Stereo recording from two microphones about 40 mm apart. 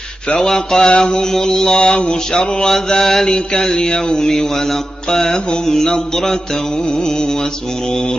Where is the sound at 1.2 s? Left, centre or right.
Centre.